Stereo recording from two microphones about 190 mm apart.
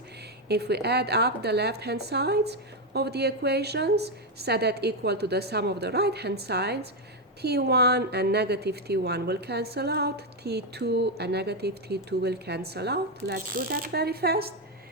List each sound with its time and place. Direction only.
0.4 s a woman's voice: 60° right (ahead or behind)